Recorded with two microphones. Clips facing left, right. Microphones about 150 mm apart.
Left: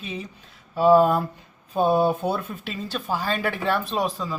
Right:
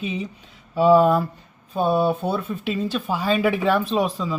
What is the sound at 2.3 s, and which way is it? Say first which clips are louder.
Speech: right 6 dB; centre (ahead or behind).